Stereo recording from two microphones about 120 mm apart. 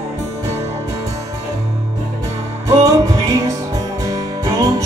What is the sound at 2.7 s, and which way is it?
Music, 30° right (ahead or behind).